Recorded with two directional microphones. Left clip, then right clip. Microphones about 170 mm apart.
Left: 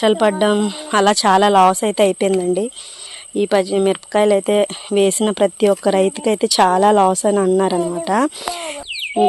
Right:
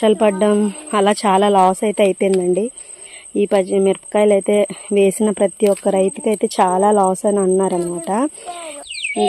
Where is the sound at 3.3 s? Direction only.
30° right (ahead or behind); by 8.3 s 10° right (ahead or behind).